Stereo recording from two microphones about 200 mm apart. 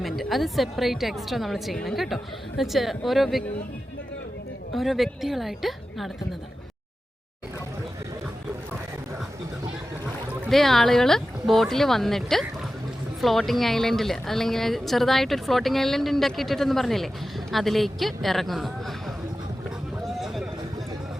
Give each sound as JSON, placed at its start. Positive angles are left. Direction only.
{"t": 0.0, "sound": "speech", "side_deg": 0}
{"t": 4.7, "sound": "speech", "side_deg": 0}
{"t": 10.4, "sound": "speech", "side_deg": 0}
{"t": 20.1, "sound": "a sound", "side_deg": 0}